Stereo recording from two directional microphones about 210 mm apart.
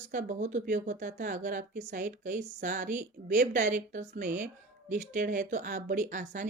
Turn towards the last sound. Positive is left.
turn(degrees=-35)  # may be behind; listen again after turning